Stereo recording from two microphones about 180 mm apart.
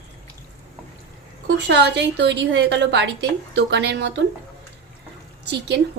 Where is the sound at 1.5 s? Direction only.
75° right (ahead or behind).